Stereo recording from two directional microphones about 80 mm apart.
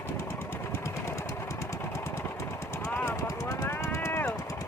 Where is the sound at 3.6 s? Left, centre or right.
Left.